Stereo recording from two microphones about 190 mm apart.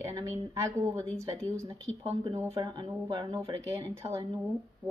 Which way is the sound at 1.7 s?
30° right (ahead or behind).